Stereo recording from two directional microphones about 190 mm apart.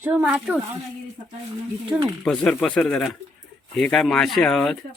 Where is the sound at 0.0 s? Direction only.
10° right (ahead or behind).